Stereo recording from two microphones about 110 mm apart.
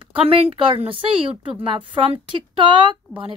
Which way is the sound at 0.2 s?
60° right (ahead or behind).